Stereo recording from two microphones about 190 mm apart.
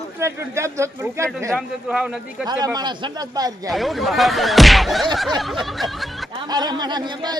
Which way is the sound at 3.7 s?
Centre (ahead or behind).